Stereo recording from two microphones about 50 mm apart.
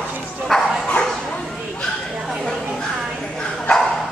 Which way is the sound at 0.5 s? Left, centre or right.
Centre.